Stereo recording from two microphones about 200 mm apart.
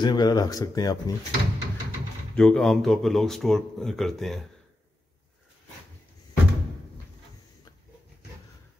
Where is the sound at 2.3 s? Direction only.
5° left (ahead or behind).